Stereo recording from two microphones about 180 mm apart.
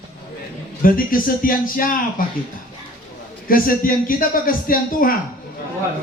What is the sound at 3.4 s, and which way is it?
A man's voice, 50° left (ahead or behind).